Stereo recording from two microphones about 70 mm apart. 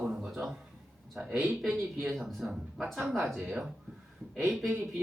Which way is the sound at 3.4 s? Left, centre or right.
Centre.